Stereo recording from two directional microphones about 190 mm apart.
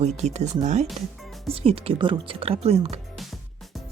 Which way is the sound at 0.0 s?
35° right (ahead or behind).